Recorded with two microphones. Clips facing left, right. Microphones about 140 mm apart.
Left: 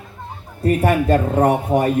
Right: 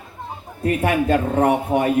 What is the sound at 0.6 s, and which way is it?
Speech, 40° left (ahead or behind).